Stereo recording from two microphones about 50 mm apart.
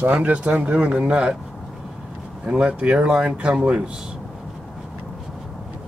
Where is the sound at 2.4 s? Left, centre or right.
Right.